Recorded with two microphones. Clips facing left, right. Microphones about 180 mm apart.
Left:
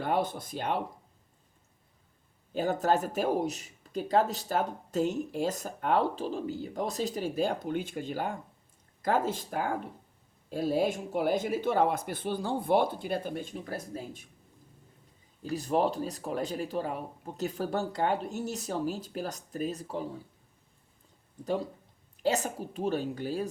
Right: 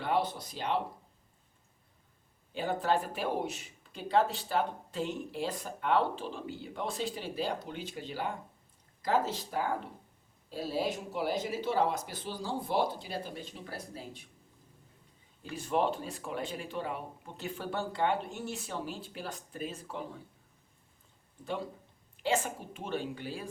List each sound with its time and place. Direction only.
0.0 s speech: 50° left (ahead or behind)
2.5 s speech: 45° left (ahead or behind)
15.4 s speech: 40° left (ahead or behind)
22.2 s speech: 40° left (ahead or behind)